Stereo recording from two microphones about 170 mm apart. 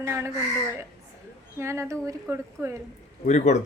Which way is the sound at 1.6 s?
15° right (ahead or behind).